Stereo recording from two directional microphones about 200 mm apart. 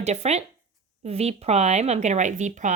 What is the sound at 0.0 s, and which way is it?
Speech, 35° right (ahead or behind).